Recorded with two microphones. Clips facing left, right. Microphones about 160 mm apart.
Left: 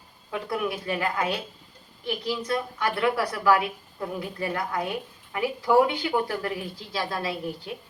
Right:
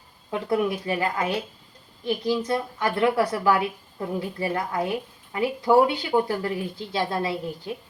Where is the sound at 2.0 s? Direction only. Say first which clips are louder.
Right 4 dB; 20° right (ahead or behind).